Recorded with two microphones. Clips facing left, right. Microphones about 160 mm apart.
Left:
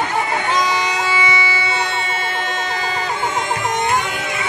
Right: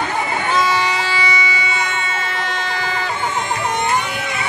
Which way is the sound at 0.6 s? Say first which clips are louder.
Right 1 dB; 20° left (ahead or behind).